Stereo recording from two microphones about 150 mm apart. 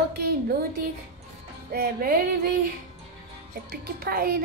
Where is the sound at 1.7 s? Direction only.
75° right (ahead or behind).